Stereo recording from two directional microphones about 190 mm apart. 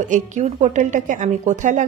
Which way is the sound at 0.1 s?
40° right (ahead or behind).